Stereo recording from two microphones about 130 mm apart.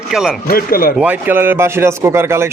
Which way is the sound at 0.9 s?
15° right (ahead or behind).